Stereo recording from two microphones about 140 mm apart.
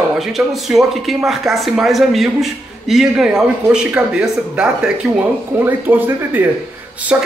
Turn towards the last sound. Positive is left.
turn(degrees=-15)  # may be behind; listen again after turning